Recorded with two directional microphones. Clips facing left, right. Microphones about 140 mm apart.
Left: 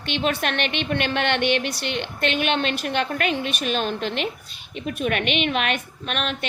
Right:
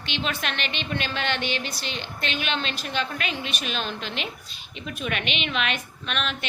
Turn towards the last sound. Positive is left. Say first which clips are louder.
# left 3 dB
turn(degrees=50)  # may be behind; listen again after turning